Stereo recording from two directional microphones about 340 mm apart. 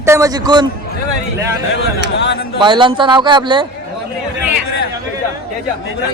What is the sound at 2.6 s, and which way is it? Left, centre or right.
Speech, centre.